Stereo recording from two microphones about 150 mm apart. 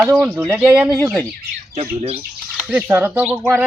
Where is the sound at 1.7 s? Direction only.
45° right (ahead or behind).